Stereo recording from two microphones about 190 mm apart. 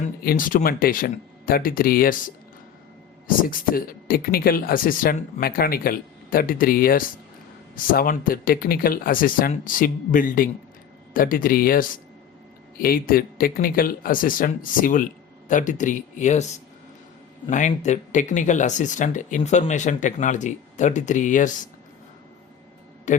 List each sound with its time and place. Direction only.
0.0 s speech: 45° left (ahead or behind)
23.1 s speech: 40° left (ahead or behind)